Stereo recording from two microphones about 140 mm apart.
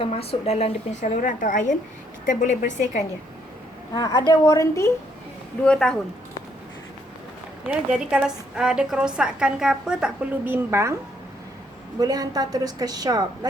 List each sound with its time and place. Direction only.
0.0 s a woman's voice: 45° left (ahead or behind); by 3.0 s 65° left (ahead or behind)
3.9 s a woman's voice: 30° left (ahead or behind)
5.6 s speech: 5° left (ahead or behind)
7.7 s a woman's voice: 5° right (ahead or behind)
11.9 s a woman's voice: 25° right (ahead or behind)